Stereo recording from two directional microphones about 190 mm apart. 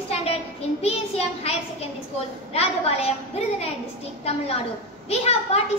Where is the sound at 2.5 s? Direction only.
35° left (ahead or behind).